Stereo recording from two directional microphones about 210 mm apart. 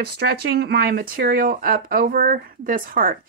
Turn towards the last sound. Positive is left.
turn(degrees=-45)  # may be behind; listen again after turning